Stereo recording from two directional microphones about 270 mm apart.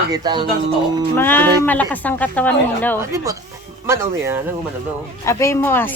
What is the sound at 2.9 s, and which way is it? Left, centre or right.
Speech, centre.